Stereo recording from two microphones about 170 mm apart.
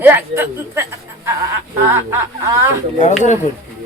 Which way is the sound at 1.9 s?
15° right (ahead or behind).